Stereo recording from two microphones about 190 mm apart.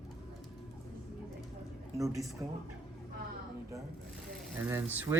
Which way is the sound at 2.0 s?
15° right (ahead or behind).